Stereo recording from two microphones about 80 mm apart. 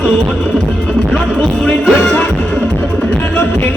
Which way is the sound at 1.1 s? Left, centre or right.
Centre.